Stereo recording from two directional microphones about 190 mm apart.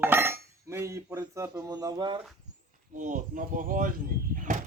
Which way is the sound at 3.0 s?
45° right (ahead or behind).